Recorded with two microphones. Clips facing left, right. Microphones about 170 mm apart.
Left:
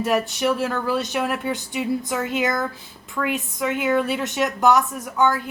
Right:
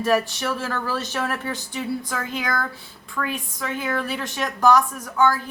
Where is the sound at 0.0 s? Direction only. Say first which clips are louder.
Left 1 dB; 20° left (ahead or behind).